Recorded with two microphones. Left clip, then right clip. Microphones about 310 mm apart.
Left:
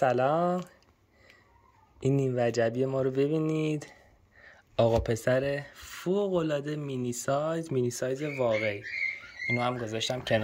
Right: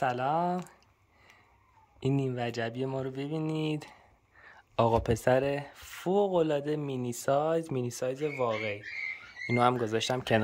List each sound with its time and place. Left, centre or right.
0.0 s speech: centre
2.0 s speech: centre
9.5 s speech: centre